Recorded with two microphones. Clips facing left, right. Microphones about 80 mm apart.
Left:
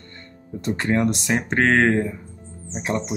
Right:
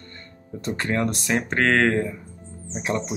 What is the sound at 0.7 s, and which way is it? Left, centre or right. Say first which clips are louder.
Speech: left 3 dB; left.